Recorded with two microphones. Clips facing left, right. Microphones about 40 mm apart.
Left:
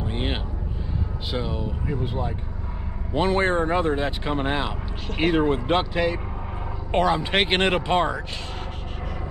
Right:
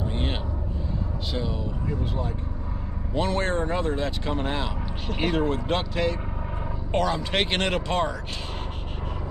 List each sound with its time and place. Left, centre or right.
0.1 s vehicle: centre
1.3 s speech: centre